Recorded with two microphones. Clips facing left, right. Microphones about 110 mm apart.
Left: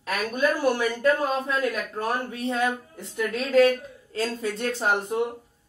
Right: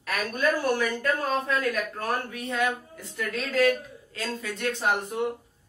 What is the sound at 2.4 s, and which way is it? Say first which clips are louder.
A woman's voice: left 2 dB; 30° left (ahead or behind).